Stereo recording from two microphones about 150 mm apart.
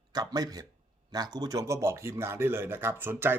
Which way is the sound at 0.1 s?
25° right (ahead or behind).